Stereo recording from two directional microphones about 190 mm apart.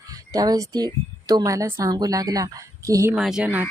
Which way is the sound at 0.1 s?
20° right (ahead or behind).